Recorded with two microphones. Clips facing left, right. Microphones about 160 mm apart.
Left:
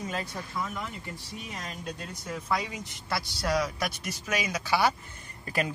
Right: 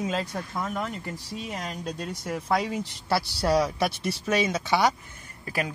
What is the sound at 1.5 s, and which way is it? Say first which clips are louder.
Speech: right 4 dB; 35° right (ahead or behind).